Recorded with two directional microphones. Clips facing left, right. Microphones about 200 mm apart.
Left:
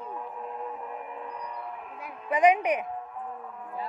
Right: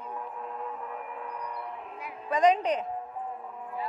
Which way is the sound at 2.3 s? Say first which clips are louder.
Left 1 dB; 15° left (ahead or behind).